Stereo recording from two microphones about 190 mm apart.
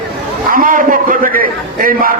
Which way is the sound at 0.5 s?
45° right (ahead or behind).